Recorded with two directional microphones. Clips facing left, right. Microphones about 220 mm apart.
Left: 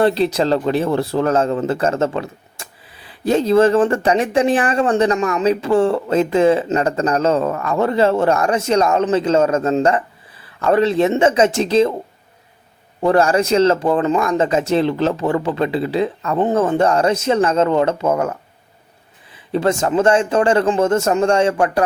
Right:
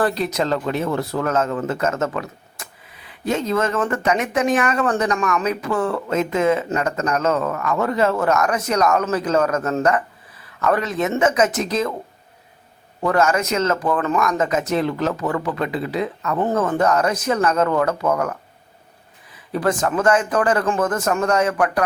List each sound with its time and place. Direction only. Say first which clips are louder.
0.0 s speech: left 5 dB; 30° left (ahead or behind)
13.0 s speech: left 4 dB; 30° left (ahead or behind)